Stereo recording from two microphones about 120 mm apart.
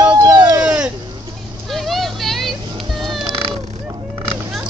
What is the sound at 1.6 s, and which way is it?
Vehicle, centre (ahead or behind).